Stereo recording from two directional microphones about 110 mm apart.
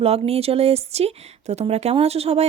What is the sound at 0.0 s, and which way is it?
Speech, 65° right (ahead or behind).